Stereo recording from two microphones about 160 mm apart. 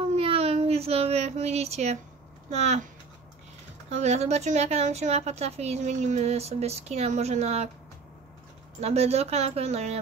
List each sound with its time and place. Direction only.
0.1 s a sound: 40° right (ahead or behind)
2.5 s speech: 45° right (ahead or behind)
3.9 s speech: 45° right (ahead or behind)
8.8 s speech: 40° right (ahead or behind)